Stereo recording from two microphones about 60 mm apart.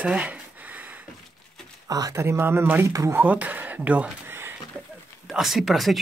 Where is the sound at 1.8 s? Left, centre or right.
Right.